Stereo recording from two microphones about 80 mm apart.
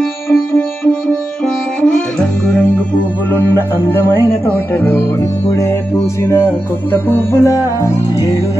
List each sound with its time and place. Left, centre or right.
0.3 s sitar: left
1.4 s music: centre
3.3 s music: left